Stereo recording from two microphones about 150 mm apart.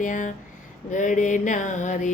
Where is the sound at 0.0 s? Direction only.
60° left (ahead or behind).